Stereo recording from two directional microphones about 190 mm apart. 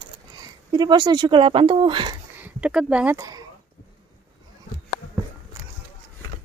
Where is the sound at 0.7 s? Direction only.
25° right (ahead or behind).